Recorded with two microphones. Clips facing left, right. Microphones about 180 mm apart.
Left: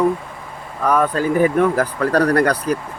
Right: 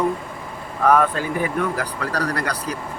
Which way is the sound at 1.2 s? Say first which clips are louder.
Left 8 dB; 45° left (ahead or behind).